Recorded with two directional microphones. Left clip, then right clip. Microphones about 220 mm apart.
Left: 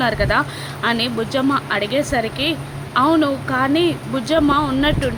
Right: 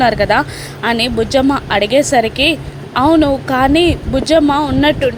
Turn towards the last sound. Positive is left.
turn(degrees=-15)  # may be behind; listen again after turning